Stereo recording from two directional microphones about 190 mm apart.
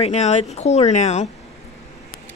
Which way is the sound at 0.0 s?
35° left (ahead or behind).